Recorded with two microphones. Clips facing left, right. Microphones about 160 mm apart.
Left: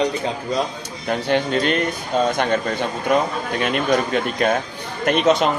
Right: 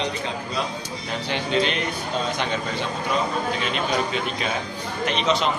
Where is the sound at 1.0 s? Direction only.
50° left (ahead or behind).